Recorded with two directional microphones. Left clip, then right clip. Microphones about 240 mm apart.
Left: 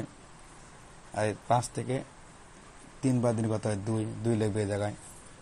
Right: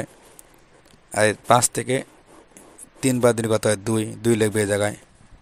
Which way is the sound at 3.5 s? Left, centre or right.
Right.